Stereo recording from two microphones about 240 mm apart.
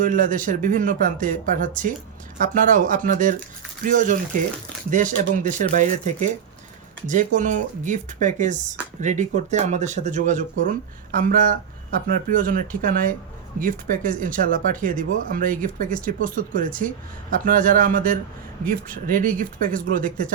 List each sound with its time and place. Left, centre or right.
0.0 s speech: right